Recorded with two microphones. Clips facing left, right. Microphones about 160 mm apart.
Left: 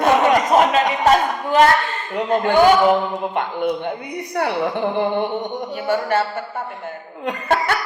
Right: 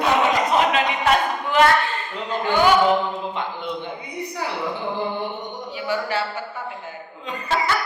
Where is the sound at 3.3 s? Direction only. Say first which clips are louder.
Left 7 dB; 55° left (ahead or behind).